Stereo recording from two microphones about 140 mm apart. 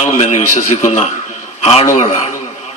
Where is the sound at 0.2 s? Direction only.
55° left (ahead or behind).